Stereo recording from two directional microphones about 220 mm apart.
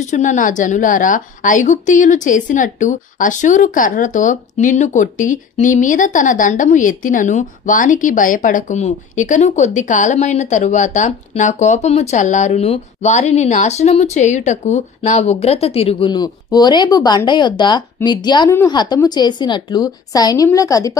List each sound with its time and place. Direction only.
0.0 s a woman's voice: 35° left (ahead or behind); by 20.9 s 15° left (ahead or behind)